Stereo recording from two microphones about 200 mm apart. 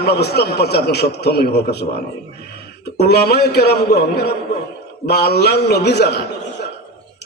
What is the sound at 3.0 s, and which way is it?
A man's voice, 55° left (ahead or behind).